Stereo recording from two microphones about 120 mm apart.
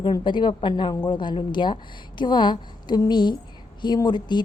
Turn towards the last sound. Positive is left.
turn(degrees=40)  # may be behind; listen again after turning